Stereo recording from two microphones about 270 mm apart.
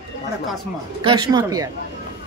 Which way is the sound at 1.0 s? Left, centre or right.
Centre.